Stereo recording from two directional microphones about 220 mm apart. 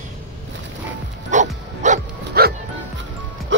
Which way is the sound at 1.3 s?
35° right (ahead or behind).